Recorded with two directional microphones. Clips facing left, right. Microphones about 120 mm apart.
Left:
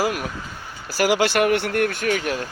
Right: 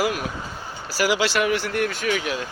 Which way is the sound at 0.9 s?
50° left (ahead or behind).